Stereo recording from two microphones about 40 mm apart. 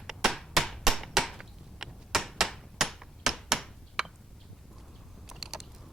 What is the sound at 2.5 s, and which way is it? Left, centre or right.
Hammer, centre.